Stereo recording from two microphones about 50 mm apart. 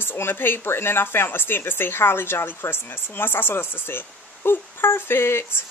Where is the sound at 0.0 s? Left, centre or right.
Left.